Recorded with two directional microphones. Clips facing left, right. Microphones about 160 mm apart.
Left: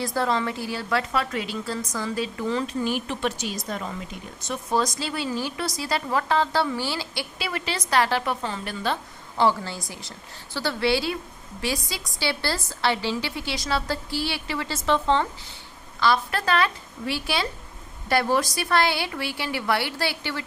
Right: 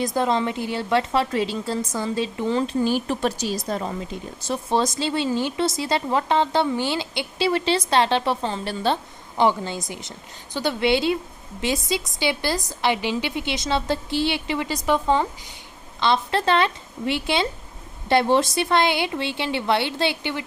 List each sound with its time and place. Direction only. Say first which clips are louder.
0.0 s a woman's voice: right 3 dB; 20° right (ahead or behind)
9.4 s a woman's voice: right 2 dB; 20° right (ahead or behind)
16.0 s a woman's voice: right 2 dB; 25° right (ahead or behind)